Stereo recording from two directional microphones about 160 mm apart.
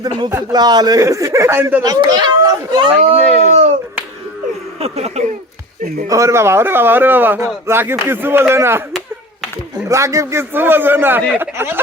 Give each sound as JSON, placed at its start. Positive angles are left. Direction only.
{"t": 0.5, "sound": "speech", "side_deg": -25}
{"t": 3.0, "sound": "speech", "side_deg": -40}
{"t": 4.8, "sound": "speech", "side_deg": -40}
{"t": 6.1, "sound": "a man's voice", "side_deg": -20}
{"t": 9.9, "sound": "a man's voice", "side_deg": -20}